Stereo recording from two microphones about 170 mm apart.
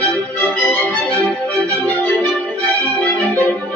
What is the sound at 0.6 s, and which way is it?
Music, 10° left (ahead or behind).